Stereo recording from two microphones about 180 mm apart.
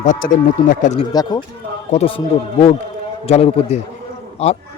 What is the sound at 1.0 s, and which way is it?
Speech, 20° left (ahead or behind).